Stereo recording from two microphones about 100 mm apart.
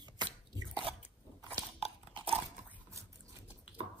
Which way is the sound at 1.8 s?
65° right (ahead or behind).